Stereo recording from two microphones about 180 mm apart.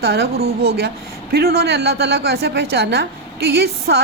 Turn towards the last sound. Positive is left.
turn(degrees=-65)  # may be behind; listen again after turning